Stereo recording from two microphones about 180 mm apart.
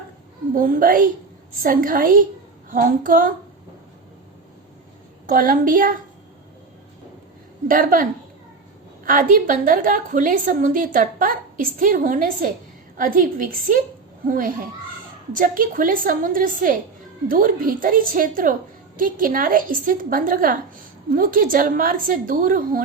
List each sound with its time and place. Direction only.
0.5 s a woman's voice: 50° right (ahead or behind)
5.2 s a woman's voice: 50° right (ahead or behind)
7.7 s a woman's voice: 50° right (ahead or behind)
9.0 s a woman's voice: 50° right (ahead or behind)